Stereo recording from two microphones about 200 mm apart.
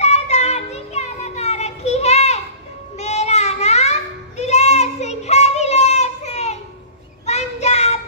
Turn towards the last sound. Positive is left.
turn(degrees=35)  # may be behind; listen again after turning